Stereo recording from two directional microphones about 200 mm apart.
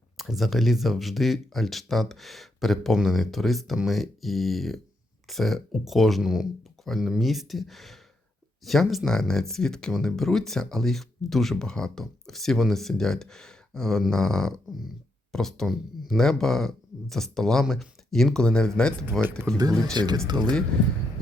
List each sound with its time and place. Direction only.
0.2 s speech: centre (ahead or behind)
19.5 s speech: 20° right (ahead or behind)
20.3 s speech: 5° left (ahead or behind)